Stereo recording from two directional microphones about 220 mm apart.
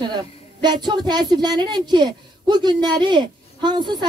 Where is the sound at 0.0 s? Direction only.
20° right (ahead or behind).